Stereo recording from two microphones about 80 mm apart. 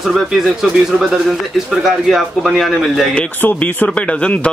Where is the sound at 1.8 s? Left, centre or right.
Centre.